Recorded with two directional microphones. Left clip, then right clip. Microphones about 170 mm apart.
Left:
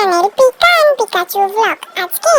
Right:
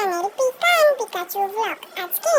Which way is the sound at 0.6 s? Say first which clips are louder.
Left 4 dB; 40° left (ahead or behind).